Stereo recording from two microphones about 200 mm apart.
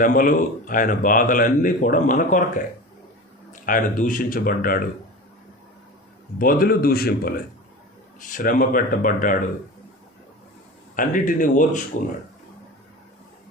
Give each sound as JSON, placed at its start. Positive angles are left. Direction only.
{"t": 0.0, "sound": "a man's voice", "side_deg": 45}
{"t": 3.5, "sound": "a man's voice", "side_deg": 40}
{"t": 6.4, "sound": "a man's voice", "side_deg": 45}
{"t": 10.9, "sound": "speech", "side_deg": 40}